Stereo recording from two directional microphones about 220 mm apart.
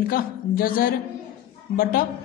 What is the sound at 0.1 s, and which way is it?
A man's voice, 40° left (ahead or behind).